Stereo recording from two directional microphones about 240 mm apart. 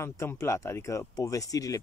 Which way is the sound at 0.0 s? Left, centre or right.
Centre.